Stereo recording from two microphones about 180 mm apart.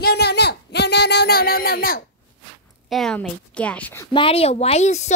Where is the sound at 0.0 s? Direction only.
65° left (ahead or behind).